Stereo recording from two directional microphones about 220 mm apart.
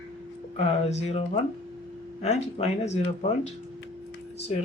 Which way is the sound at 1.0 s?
30° left (ahead or behind).